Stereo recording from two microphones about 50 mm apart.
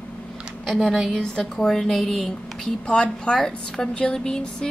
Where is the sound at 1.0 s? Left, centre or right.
Centre.